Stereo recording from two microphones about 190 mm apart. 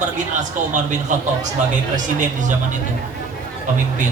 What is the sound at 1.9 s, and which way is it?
Speech, 40° right (ahead or behind).